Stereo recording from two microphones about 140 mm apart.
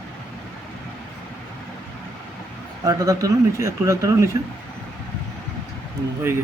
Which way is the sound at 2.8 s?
25° right (ahead or behind).